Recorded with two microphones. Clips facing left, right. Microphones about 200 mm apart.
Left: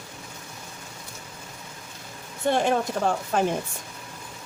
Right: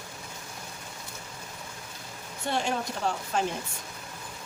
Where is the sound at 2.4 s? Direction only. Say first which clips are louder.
Left 7 dB; 50° left (ahead or behind).